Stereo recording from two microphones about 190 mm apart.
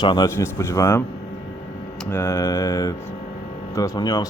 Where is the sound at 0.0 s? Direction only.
20° left (ahead or behind).